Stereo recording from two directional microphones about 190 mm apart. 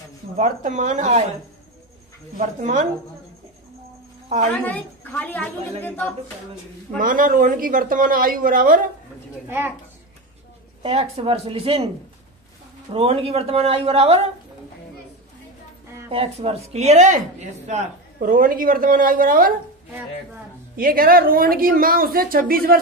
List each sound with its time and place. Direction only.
0.4 s a man's voice: 40° right (ahead or behind)
2.3 s a man's voice: 40° right (ahead or behind)
4.6 s speech: 10° left (ahead or behind)
7.0 s speech: 45° right (ahead or behind)
10.8 s a man's voice: 30° right (ahead or behind)
12.9 s a man's voice: 30° right (ahead or behind)
16.1 s speech: 30° right (ahead or behind); by 19.5 s 50° right (ahead or behind)
20.7 s speech: 50° right (ahead or behind)